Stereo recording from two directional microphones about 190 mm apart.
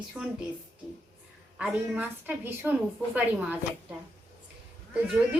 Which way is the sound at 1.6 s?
10° right (ahead or behind).